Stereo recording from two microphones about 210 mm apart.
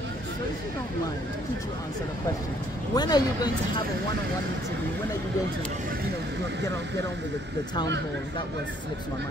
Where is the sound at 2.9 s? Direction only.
20° left (ahead or behind).